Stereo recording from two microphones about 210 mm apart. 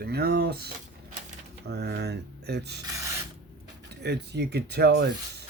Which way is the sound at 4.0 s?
50° right (ahead or behind).